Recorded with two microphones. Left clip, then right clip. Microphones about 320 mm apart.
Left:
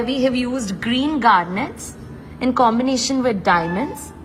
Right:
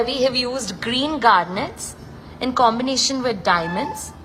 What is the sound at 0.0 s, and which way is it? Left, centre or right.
A woman's voice, centre.